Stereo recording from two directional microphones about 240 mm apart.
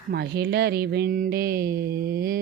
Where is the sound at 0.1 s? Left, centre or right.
Right.